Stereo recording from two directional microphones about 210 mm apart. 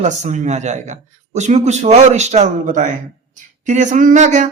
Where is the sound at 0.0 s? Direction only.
35° right (ahead or behind).